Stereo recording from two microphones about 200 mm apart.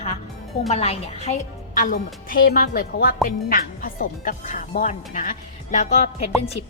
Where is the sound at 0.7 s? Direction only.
30° left (ahead or behind).